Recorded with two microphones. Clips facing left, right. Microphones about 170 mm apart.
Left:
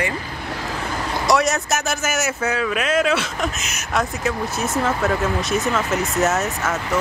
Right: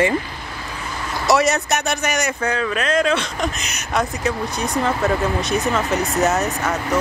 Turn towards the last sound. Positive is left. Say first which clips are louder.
# right 2 dB
turn(degrees=0)  # may be behind; listen again after turning